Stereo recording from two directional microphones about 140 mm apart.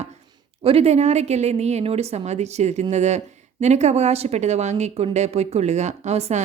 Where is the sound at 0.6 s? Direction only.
45° right (ahead or behind).